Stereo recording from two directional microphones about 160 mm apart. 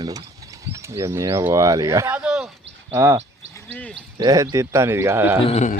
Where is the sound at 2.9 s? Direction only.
20° right (ahead or behind).